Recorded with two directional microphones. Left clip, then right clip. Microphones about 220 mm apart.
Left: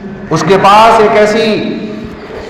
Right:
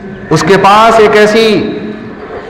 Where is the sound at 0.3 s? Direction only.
50° right (ahead or behind).